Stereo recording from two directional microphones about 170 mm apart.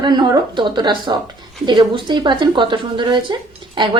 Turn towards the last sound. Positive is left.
turn(degrees=-30)  # may be behind; listen again after turning